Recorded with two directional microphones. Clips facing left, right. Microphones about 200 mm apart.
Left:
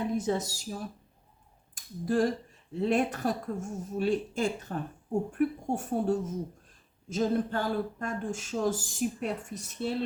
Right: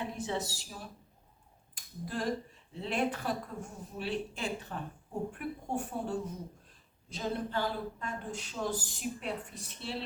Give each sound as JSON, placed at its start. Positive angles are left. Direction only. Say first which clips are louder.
{"t": 0.2, "sound": "a woman's voice", "louder": "left 6 dB", "side_deg": 40}